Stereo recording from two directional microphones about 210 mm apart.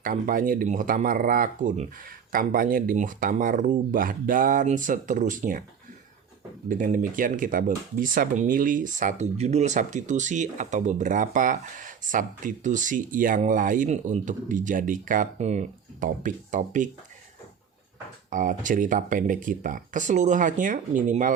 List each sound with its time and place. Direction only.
0.0 s speech: 40° right (ahead or behind)
6.7 s speech: 40° right (ahead or behind)
18.3 s speech: 40° right (ahead or behind)